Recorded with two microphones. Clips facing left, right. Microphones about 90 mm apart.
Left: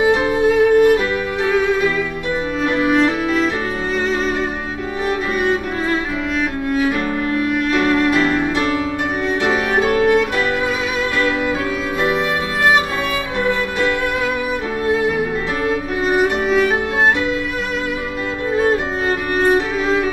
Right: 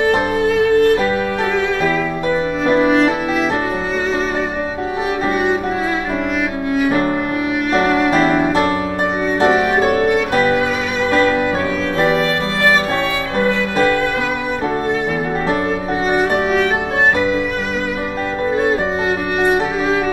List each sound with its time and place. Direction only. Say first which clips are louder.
0.0 s music: left 1 dB; 10° left (ahead or behind)
2.9 s music: right 1 dB; centre (ahead or behind)
6.7 s music: right 4 dB; 5° right (ahead or behind)
9.8 s violin: even; centre (ahead or behind)
10.3 s violin: right 4 dB; 40° right (ahead or behind)
16.1 s music: even; centre (ahead or behind)
18.5 s violin: left 1 dB; centre (ahead or behind)